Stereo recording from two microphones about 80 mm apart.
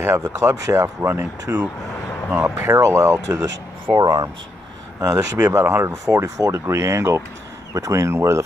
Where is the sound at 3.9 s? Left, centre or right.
Right.